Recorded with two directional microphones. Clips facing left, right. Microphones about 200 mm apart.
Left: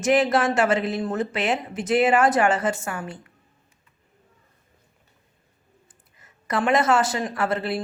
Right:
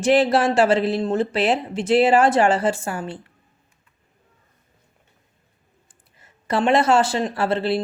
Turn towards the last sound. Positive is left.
turn(degrees=-30)  # may be behind; listen again after turning